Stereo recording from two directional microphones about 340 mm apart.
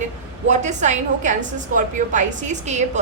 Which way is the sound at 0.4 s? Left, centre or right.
Right.